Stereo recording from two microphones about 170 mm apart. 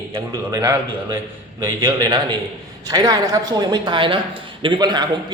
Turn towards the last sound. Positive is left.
turn(degrees=-25)  # may be behind; listen again after turning